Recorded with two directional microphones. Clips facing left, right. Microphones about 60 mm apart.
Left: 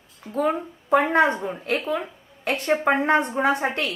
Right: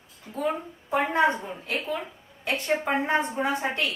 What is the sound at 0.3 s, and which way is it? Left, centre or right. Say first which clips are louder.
Speech: left 5 dB; left.